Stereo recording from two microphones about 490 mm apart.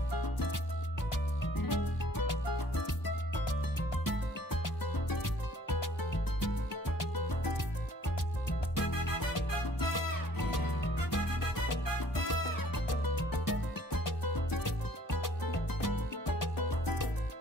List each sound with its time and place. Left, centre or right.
0.1 s music: left
4.0 s music: left
8.7 s music: left